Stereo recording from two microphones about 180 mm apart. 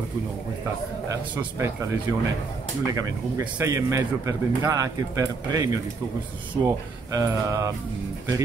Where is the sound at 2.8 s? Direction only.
15° right (ahead or behind).